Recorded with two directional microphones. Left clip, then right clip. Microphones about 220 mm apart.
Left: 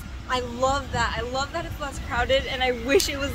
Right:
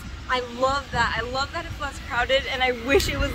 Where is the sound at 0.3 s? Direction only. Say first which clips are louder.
Right 1 dB; 15° left (ahead or behind).